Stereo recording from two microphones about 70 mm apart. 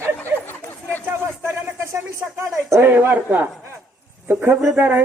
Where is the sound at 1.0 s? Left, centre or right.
Right.